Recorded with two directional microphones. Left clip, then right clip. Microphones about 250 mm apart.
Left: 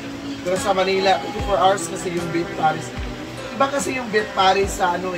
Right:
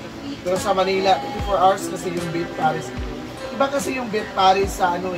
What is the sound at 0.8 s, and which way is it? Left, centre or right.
Speech, centre.